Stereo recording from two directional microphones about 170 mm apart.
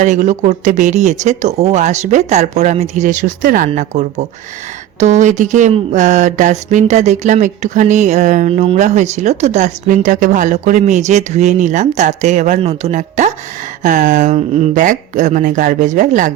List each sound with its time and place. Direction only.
0.0 s speech: 45° right (ahead or behind)